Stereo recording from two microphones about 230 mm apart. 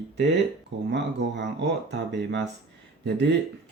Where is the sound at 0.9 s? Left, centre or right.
Right.